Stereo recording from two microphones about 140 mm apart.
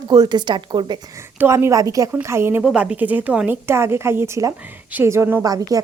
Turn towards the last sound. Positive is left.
turn(degrees=-25)  # may be behind; listen again after turning